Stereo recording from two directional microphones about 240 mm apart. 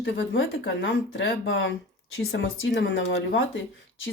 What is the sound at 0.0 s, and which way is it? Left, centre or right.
Speech, left.